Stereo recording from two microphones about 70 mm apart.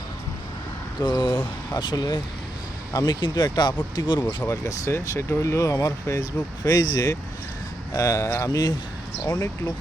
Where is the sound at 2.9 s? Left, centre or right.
Left.